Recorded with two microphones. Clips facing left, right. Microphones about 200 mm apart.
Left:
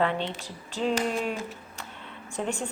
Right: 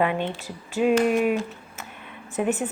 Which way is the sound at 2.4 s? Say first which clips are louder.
Right 7 dB; 10° right (ahead or behind).